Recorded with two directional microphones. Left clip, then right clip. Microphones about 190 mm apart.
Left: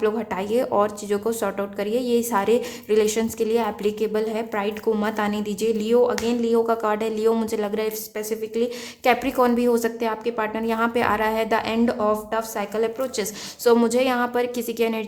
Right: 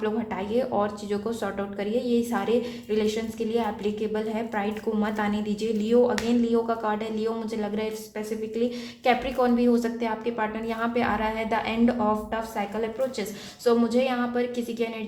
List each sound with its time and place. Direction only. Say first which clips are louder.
0.0 s speech: left 5 dB; 40° left (ahead or behind)
9.0 s speech: left 4 dB; 40° left (ahead or behind)